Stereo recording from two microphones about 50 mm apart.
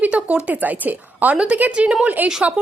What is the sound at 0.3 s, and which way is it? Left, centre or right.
Speech, right.